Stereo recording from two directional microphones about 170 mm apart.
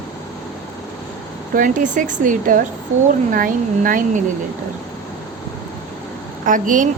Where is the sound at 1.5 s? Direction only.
50° right (ahead or behind).